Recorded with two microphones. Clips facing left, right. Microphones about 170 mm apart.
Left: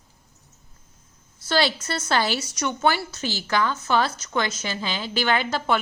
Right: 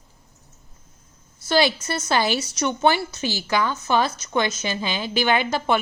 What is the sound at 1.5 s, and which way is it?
A woman's voice, 15° right (ahead or behind).